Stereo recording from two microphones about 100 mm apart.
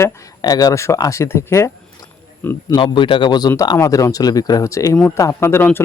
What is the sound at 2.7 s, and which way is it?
A man's voice, 55° left (ahead or behind).